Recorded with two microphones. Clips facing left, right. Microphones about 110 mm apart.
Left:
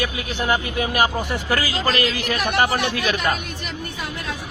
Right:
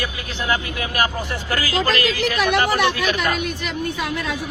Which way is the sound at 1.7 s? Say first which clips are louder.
Right 2 dB; 90° right.